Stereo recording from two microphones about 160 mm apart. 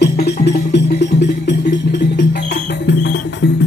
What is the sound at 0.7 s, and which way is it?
Music, 90° left.